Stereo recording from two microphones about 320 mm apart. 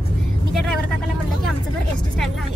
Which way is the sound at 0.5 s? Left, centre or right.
Centre.